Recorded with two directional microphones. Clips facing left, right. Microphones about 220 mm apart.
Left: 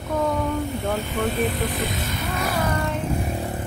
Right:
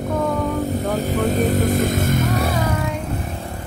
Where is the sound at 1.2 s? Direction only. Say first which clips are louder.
Right 5 dB; 40° right (ahead or behind).